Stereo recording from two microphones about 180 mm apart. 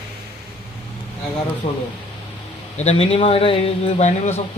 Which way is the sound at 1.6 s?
35° left (ahead or behind).